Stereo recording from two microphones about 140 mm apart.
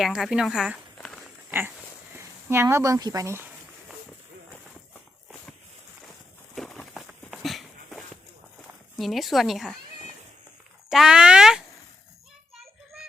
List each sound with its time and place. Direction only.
0.0 s speech: centre (ahead or behind)
1.5 s a sound: 15° right (ahead or behind)
2.1 s speech: 20° right (ahead or behind)
6.6 s a sound: centre (ahead or behind)
9.0 s a woman's voice: centre (ahead or behind)
10.8 s speech: 5° right (ahead or behind)
12.5 s child singing: centre (ahead or behind)